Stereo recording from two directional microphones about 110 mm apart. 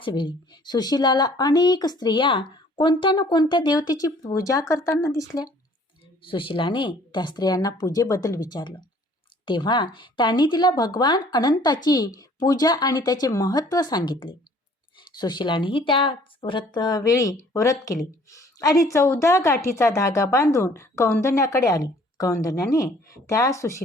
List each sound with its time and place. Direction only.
0.0 s speech: 45° left (ahead or behind)
6.2 s speech: 50° left (ahead or behind); by 23.8 s 25° left (ahead or behind)